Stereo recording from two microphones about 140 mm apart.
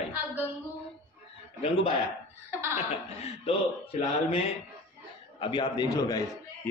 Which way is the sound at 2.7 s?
50° left (ahead or behind).